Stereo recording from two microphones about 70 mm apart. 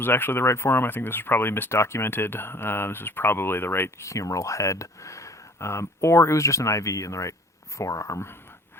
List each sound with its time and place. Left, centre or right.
0.0 s speech: left